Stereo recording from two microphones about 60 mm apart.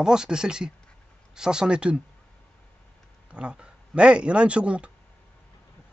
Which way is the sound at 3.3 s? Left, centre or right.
Centre.